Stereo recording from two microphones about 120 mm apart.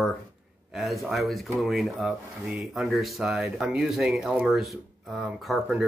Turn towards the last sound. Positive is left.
turn(degrees=-5)  # may be behind; listen again after turning